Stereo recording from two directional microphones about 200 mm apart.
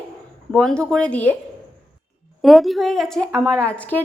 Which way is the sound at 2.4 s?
Centre (ahead or behind).